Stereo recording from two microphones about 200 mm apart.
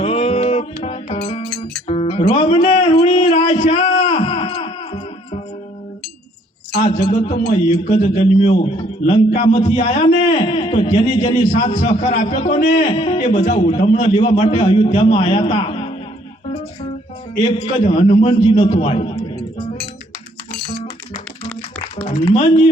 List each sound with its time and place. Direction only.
0.0 s music: 30° left (ahead or behind)
6.7 s a man's voice: 40° left (ahead or behind)
12.9 s a man's voice: 30° left (ahead or behind)
13.4 s a man's voice: 40° left (ahead or behind)
14.0 s a man's voice: 30° left (ahead or behind)
17.6 s a man's voice: 30° left (ahead or behind)
22.0 s a man's voice: 30° left (ahead or behind)